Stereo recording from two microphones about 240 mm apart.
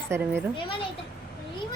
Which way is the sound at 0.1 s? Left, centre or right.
Centre.